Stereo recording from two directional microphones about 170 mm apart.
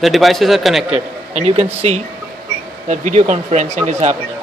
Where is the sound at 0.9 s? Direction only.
40° right (ahead or behind).